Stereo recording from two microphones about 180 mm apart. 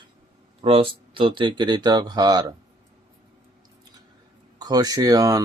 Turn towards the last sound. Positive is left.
turn(degrees=-20)  # may be behind; listen again after turning